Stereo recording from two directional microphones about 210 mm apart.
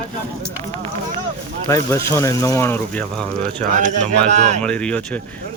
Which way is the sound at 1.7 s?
15° left (ahead or behind).